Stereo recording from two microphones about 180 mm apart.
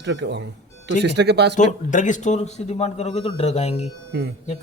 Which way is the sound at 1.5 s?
45° left (ahead or behind).